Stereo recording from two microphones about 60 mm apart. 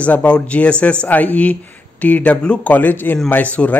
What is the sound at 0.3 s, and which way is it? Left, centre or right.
Speech, centre.